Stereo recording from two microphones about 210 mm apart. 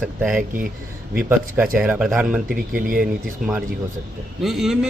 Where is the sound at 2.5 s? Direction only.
40° right (ahead or behind).